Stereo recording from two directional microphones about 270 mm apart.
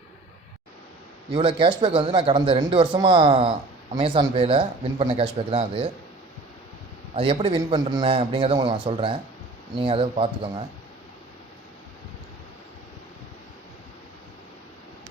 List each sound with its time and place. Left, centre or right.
1.3 s speech: centre
7.2 s speech: centre